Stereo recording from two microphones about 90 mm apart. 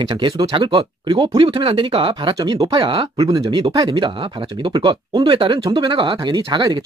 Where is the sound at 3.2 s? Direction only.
45° right (ahead or behind).